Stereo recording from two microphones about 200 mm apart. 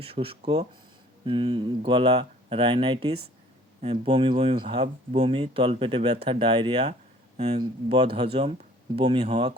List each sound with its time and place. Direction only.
0.0 s speech: 30° right (ahead or behind)